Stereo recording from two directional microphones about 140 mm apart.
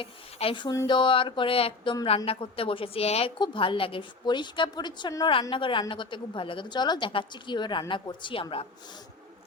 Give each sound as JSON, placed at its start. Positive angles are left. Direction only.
{"t": 0.0, "sound": "speech", "side_deg": 40}
{"t": 3.3, "sound": "speech", "side_deg": 35}